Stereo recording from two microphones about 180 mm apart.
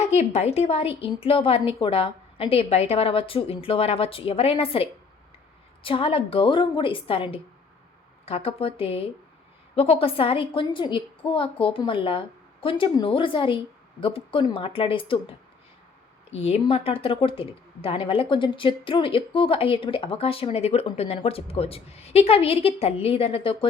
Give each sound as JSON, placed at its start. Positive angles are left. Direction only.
{"t": 0.0, "sound": "a woman's voice", "side_deg": 35}